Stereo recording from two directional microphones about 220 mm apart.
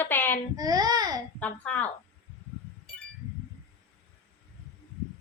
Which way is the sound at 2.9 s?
5° left (ahead or behind).